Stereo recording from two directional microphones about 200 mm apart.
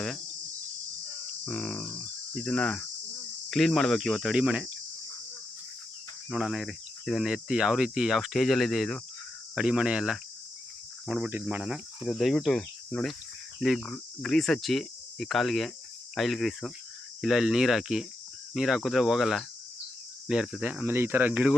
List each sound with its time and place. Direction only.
1.5 s cricket: 5° left (ahead or behind)
2.3 s speech: 5° left (ahead or behind)
6.3 s speech: centre (ahead or behind)